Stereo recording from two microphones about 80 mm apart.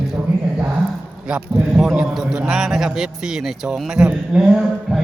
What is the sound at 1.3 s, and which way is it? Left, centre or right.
A man's voice, centre.